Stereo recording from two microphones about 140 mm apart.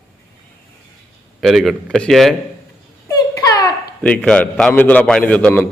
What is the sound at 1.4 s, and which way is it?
Speech, centre (ahead or behind).